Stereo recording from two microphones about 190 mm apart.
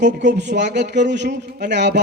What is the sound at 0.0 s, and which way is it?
A man's voice, 65° right (ahead or behind).